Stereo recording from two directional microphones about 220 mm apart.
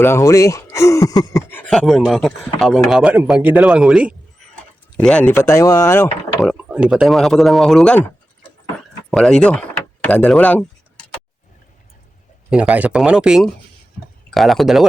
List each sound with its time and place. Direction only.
0.0 s speech: 15° left (ahead or behind)
6.4 s speech: centre (ahead or behind)
9.0 s speech: 5° left (ahead or behind)
12.5 s speech: 5° right (ahead or behind)